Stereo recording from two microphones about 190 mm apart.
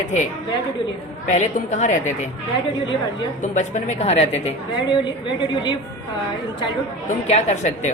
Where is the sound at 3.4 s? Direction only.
40° left (ahead or behind).